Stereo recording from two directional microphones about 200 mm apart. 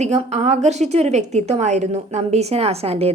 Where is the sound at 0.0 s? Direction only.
35° right (ahead or behind).